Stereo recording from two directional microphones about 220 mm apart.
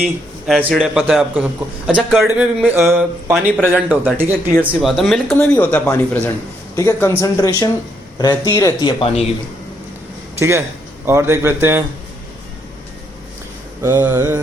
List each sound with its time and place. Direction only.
0.0 s a man's voice: 5° right (ahead or behind); by 9.2 s 20° left (ahead or behind)
10.3 s speech: 10° right (ahead or behind)
13.8 s speech: 10° right (ahead or behind)